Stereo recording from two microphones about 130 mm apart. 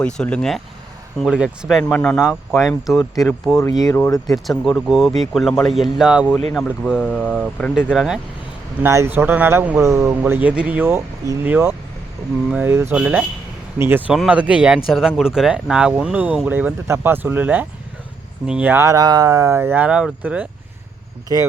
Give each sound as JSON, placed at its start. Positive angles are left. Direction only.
{"t": 0.0, "sound": "speech", "side_deg": 5}
{"t": 8.8, "sound": "speech", "side_deg": -20}